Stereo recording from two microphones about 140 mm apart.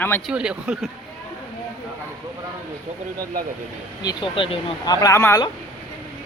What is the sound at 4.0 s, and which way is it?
Speech, 35° left (ahead or behind).